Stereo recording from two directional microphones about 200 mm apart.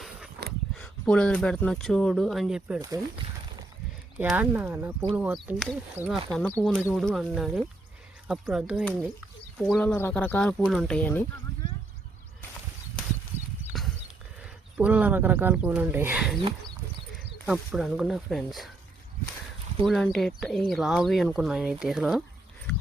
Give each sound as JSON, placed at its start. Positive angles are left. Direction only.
{"t": 0.8, "sound": "speech", "side_deg": 5}
{"t": 4.2, "sound": "speech", "side_deg": -10}
{"t": 13.3, "sound": "horse", "side_deg": 10}
{"t": 13.7, "sound": "horse", "side_deg": 0}
{"t": 14.8, "sound": "speech", "side_deg": -10}
{"t": 17.3, "sound": "a sound", "side_deg": 5}
{"t": 17.7, "sound": "speech", "side_deg": 0}
{"t": 19.8, "sound": "speech", "side_deg": 0}